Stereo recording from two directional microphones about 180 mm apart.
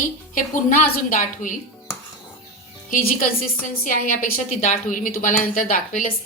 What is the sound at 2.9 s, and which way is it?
A woman's voice, 55° left (ahead or behind).